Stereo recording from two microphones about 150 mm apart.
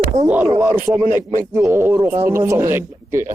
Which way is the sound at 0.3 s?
15° right (ahead or behind).